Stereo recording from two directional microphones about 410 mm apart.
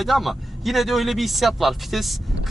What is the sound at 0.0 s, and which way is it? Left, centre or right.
Speech, centre.